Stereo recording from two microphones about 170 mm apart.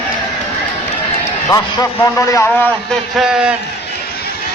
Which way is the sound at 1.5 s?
20° left (ahead or behind).